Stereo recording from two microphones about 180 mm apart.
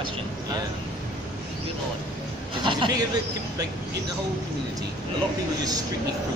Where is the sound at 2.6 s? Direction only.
25° right (ahead or behind).